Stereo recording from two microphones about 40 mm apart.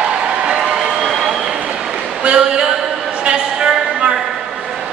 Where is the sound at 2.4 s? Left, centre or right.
Centre.